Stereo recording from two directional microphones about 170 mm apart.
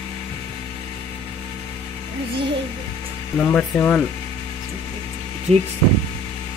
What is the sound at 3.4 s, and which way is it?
Speech, 10° left (ahead or behind).